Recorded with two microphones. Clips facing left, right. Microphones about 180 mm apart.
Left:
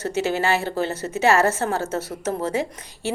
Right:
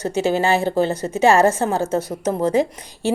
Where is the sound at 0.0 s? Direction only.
15° right (ahead or behind).